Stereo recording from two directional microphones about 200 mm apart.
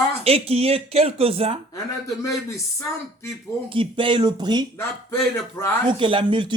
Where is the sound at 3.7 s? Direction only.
25° right (ahead or behind).